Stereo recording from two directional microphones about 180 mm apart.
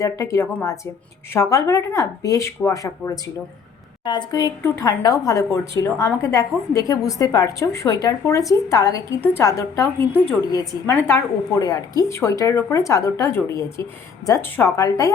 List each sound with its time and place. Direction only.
0.0 s a woman's voice: 15° left (ahead or behind)